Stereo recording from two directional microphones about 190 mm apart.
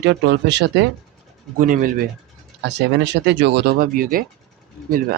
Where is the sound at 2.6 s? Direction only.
65° right (ahead or behind); by 4.2 s 50° right (ahead or behind).